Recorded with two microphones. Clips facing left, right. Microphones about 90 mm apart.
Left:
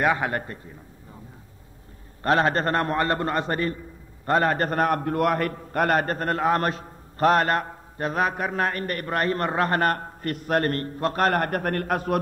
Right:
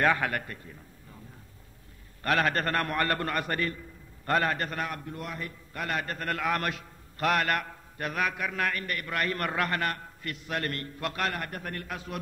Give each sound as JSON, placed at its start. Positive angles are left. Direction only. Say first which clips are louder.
{"t": 0.0, "sound": "a man's voice", "louder": "left 3 dB", "side_deg": 20}
{"t": 2.2, "sound": "a man's voice", "louder": "left 6 dB", "side_deg": 30}